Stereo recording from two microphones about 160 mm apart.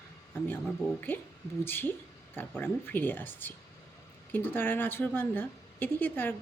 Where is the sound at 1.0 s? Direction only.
10° left (ahead or behind).